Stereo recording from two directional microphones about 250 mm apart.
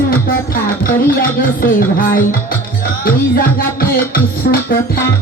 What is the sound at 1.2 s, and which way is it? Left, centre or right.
Music, left.